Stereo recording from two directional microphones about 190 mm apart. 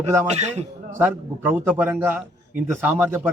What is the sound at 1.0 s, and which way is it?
Speech, 10° right (ahead or behind).